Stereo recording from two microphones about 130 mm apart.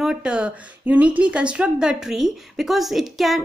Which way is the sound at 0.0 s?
5° right (ahead or behind).